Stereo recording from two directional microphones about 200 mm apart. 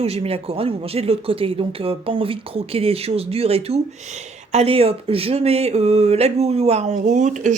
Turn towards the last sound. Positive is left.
turn(degrees=-40)  # may be behind; listen again after turning